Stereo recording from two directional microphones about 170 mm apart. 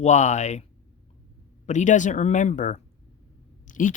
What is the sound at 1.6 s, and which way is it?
Speech, 45° left (ahead or behind).